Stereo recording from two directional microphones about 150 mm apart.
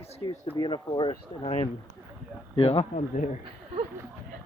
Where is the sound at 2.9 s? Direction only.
55° left (ahead or behind).